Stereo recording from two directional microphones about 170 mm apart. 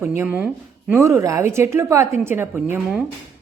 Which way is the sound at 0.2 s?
10° right (ahead or behind).